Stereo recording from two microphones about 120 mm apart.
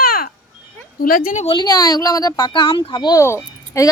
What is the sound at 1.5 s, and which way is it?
Speech, 35° left (ahead or behind).